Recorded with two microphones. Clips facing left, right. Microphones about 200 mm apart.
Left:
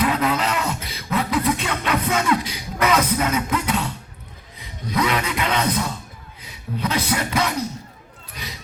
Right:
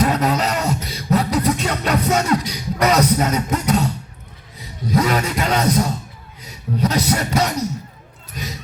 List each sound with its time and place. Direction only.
0.0 s beatboxing: 40° right (ahead or behind)
4.5 s speech: 45° right (ahead or behind)
8.3 s a sound: 45° right (ahead or behind)